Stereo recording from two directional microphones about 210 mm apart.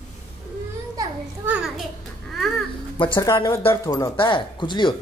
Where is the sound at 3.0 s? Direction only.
20° left (ahead or behind).